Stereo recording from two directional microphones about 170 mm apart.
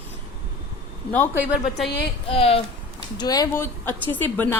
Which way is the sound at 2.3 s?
35° left (ahead or behind).